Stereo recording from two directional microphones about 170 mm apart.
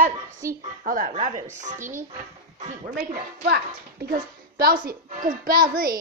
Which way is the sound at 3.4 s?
65° right (ahead or behind).